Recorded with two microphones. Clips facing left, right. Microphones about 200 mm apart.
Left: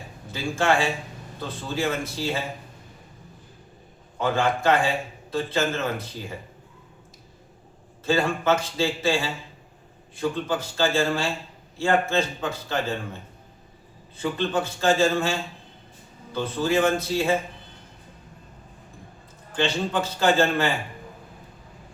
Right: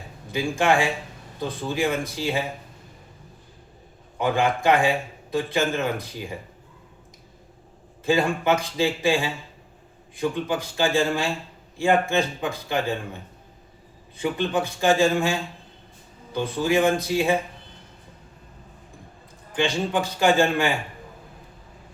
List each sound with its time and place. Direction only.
0.3 s a man's voice: 15° right (ahead or behind)
4.2 s a man's voice: 15° right (ahead or behind)
8.0 s a man's voice: 15° right (ahead or behind)
14.2 s a man's voice: 15° right (ahead or behind)
19.5 s a man's voice: 15° right (ahead or behind)